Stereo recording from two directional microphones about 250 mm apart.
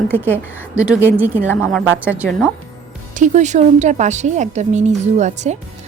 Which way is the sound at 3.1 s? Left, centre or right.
Right.